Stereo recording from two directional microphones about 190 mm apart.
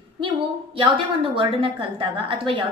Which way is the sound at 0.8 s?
30° right (ahead or behind).